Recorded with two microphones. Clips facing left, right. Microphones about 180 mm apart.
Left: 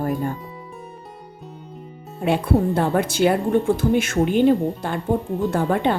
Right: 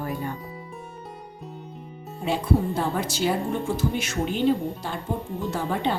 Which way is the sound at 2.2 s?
60° left (ahead or behind).